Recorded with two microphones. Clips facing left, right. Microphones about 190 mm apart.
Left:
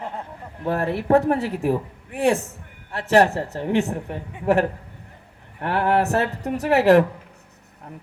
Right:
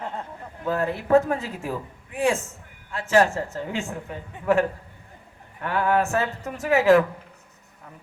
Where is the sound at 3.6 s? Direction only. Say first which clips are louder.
Left 9 dB; 65° left (ahead or behind).